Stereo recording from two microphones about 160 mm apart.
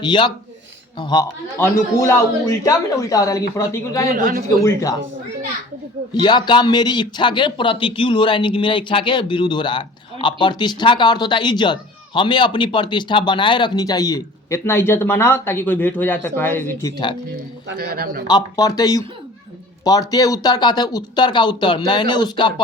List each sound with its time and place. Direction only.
0.0 s a man's voice: 30° left (ahead or behind)
4.1 s a man's voice: 65° right (ahead or behind)
4.6 s a man's voice: 20° left (ahead or behind)
6.1 s a man's voice: 25° left (ahead or behind)
17.7 s a man's voice: 70° right (ahead or behind)
18.3 s a man's voice: 25° left (ahead or behind)